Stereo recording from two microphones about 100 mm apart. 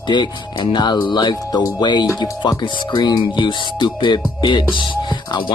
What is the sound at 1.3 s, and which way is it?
Speech, 35° left (ahead or behind).